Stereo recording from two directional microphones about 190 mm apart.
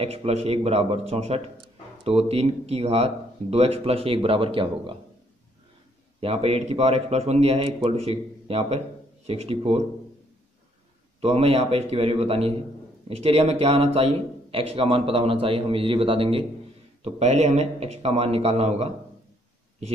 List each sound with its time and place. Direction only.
0.0 s a man's voice: 35° right (ahead or behind)
6.2 s a man's voice: 35° right (ahead or behind)
11.1 s a man's voice: 30° right (ahead or behind)